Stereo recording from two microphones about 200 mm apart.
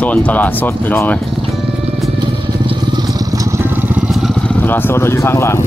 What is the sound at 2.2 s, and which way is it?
Vehicle, 20° right (ahead or behind).